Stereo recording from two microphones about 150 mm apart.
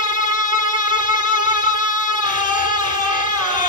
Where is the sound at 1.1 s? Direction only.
30° right (ahead or behind).